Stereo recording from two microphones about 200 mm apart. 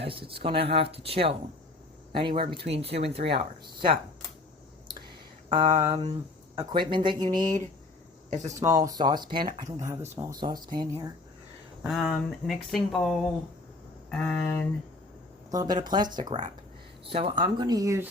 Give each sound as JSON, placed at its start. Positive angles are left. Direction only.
{"t": 0.0, "sound": "speech", "side_deg": -25}
{"t": 5.5, "sound": "speech", "side_deg": -20}
{"t": 8.4, "sound": "speech", "side_deg": -15}
{"t": 11.9, "sound": "speech", "side_deg": 0}
{"t": 15.4, "sound": "speech", "side_deg": -20}